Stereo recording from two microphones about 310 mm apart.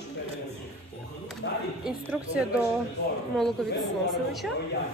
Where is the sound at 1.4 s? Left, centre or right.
Left.